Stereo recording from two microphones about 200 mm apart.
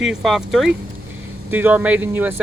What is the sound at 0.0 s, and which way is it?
Speech, centre (ahead or behind).